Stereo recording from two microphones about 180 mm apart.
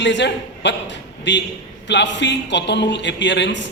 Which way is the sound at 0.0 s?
75° left (ahead or behind).